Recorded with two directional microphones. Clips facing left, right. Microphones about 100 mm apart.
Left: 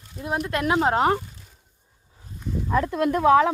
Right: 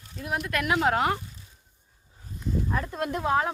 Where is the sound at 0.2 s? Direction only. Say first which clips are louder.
Left 4 dB; 25° left (ahead or behind).